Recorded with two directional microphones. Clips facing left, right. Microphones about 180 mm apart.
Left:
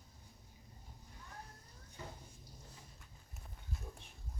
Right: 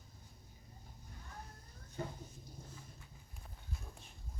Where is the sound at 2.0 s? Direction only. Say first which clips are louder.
Right 7 dB; 55° right (ahead or behind).